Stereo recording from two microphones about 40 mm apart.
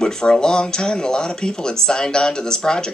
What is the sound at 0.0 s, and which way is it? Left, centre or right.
Speech, centre.